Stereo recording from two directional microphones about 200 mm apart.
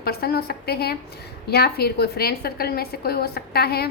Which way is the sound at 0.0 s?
50° left (ahead or behind).